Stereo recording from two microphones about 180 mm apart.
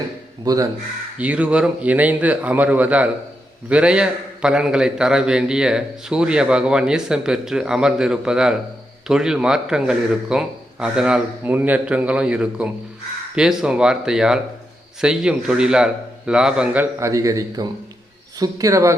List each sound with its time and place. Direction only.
0.4 s a man's voice: 20° right (ahead or behind)
1.2 s a man's voice: 5° right (ahead or behind)
17.0 s a man's voice: 20° right (ahead or behind)